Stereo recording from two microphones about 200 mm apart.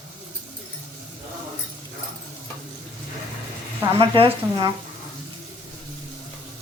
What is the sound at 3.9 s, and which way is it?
Speech, 25° right (ahead or behind).